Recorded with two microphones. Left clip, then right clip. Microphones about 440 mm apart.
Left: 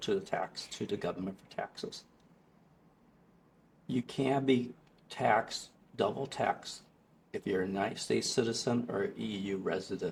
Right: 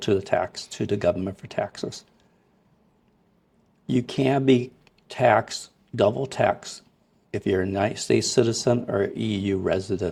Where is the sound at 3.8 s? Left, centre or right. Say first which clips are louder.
Right 10 dB; right.